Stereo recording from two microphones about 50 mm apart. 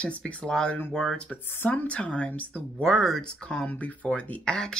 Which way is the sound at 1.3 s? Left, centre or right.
Left.